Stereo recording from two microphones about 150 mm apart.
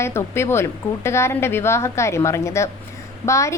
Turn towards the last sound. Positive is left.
turn(degrees=20)  # may be behind; listen again after turning